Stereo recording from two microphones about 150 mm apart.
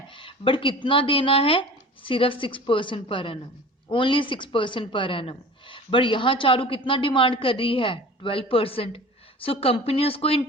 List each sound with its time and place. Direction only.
0.1 s a woman's voice: 35° left (ahead or behind)